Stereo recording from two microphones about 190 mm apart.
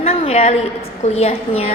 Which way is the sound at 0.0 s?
30° left (ahead or behind).